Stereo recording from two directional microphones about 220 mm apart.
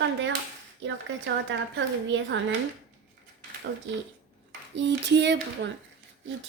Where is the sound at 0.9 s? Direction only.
55° right (ahead or behind).